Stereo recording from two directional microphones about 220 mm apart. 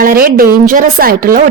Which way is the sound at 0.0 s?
40° right (ahead or behind).